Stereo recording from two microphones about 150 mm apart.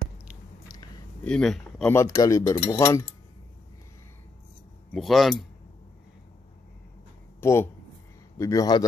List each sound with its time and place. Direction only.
1.2 s speech: 5° left (ahead or behind)
1.9 s speech: 20° left (ahead or behind)
4.9 s speech: centre (ahead or behind)
7.3 s speech: 15° left (ahead or behind)